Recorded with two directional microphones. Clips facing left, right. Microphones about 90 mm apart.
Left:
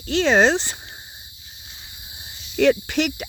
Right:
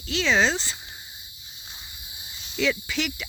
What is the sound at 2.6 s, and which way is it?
Speech, 55° left (ahead or behind).